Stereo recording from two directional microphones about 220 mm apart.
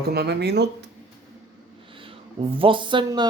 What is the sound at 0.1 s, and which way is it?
Mantra, 50° right (ahead or behind).